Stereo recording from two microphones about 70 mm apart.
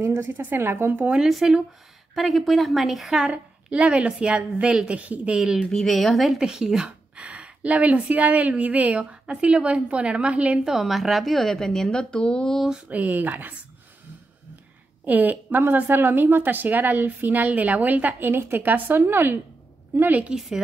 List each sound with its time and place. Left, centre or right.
0.0 s speech: right
1.0 s a woman's voice: centre
5.4 s a woman's voice: centre
12.6 s speech: centre
12.9 s a woman's voice: right
15.0 s a woman's voice: right
20.0 s a woman's voice: right
20.3 s a woman's voice: centre